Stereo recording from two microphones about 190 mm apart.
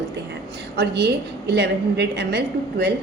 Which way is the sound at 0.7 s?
60° right (ahead or behind).